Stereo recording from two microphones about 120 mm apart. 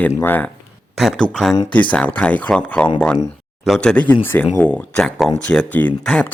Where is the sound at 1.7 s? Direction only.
10° left (ahead or behind).